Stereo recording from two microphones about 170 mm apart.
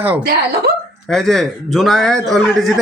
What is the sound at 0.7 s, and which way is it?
Speech, 60° right (ahead or behind).